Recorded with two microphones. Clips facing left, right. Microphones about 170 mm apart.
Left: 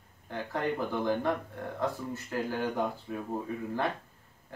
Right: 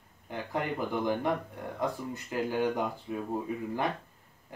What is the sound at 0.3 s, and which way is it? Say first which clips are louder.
Speech: left 1 dB; 15° right (ahead or behind).